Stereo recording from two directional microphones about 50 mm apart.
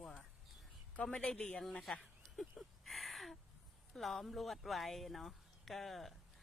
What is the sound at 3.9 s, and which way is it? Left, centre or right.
Speech, centre.